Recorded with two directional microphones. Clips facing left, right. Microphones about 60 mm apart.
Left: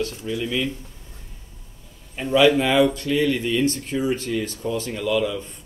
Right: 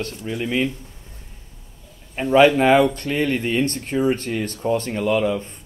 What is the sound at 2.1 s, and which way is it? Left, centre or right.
Speech, right.